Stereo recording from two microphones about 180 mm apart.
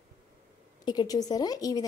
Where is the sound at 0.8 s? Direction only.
20° left (ahead or behind).